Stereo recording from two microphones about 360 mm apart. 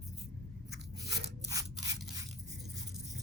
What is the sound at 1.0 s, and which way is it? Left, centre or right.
Scissors, centre.